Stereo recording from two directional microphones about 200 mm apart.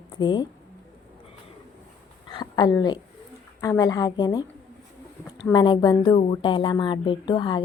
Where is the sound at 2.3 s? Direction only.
20° left (ahead or behind).